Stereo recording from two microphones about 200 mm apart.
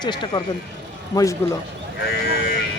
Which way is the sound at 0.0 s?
20° left (ahead or behind).